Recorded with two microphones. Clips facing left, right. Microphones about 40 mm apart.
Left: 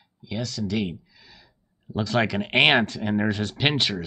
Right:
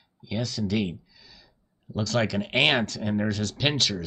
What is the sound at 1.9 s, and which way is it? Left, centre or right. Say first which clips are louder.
Speech: left 2 dB; left.